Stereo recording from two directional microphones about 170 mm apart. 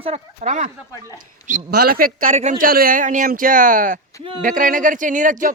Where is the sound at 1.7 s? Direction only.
65° right (ahead or behind).